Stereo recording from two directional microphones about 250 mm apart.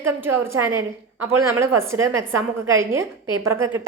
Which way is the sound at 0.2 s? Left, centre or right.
Centre.